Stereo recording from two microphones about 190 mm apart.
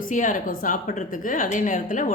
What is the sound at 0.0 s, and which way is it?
A woman's voice, 45° left (ahead or behind).